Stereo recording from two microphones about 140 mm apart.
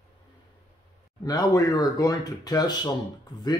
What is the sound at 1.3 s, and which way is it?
Speech, 25° left (ahead or behind).